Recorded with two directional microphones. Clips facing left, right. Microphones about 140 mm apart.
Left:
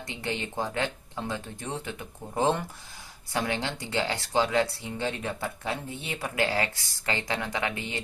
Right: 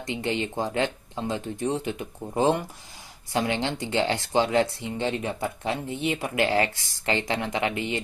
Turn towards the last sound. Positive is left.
turn(degrees=-20)  # may be behind; listen again after turning